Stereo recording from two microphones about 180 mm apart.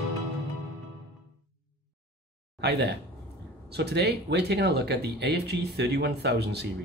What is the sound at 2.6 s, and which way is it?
Speech, 65° right (ahead or behind).